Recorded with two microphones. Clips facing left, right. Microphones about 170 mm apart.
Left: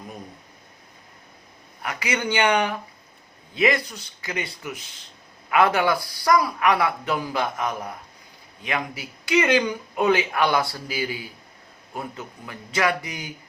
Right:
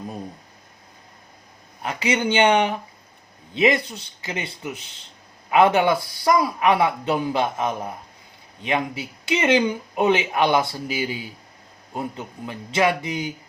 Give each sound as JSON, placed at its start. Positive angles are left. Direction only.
{"t": 1.8, "sound": "speech", "side_deg": -25}